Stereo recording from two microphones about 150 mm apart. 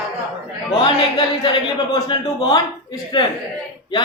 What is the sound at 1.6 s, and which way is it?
A man's voice, 30° left (ahead or behind).